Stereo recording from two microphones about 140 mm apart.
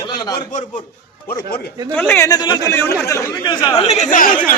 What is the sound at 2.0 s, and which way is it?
A man's voice, 15° left (ahead or behind).